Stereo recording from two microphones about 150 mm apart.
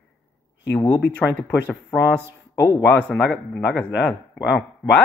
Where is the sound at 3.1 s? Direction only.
10° left (ahead or behind).